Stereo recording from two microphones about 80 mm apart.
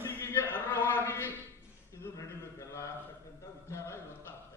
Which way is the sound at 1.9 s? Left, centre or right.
Left.